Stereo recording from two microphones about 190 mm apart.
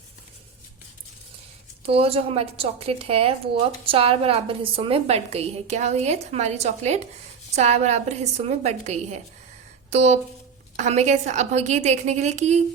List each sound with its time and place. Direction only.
1.8 s speech: 30° right (ahead or behind)